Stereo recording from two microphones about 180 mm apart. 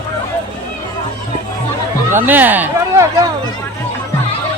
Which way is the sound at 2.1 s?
10° right (ahead or behind).